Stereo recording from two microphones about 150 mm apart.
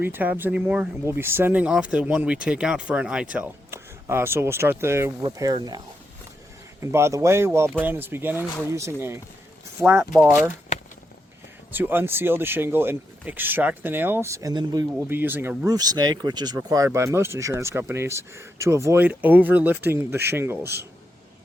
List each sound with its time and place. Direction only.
0.0 s speech: 10° right (ahead or behind); by 5.8 s 25° right (ahead or behind)
6.9 s speech: 20° right (ahead or behind)
11.7 s speech: 15° right (ahead or behind)
14.9 s speech: 10° right (ahead or behind)